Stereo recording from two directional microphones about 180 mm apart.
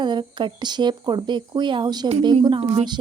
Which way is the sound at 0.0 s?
25° right (ahead or behind).